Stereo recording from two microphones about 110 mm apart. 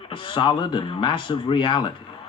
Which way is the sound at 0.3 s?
45° left (ahead or behind).